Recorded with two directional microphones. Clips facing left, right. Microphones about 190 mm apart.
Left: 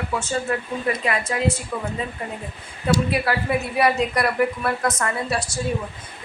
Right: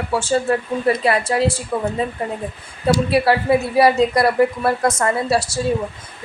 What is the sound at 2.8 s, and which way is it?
A woman's voice, 30° right (ahead or behind).